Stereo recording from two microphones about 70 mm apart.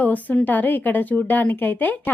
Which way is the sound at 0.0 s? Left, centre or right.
Left.